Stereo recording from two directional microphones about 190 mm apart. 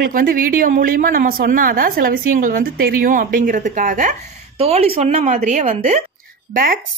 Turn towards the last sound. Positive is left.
turn(degrees=-50)  # may be behind; listen again after turning